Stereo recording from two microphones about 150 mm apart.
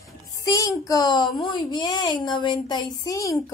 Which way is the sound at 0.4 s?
25° left (ahead or behind).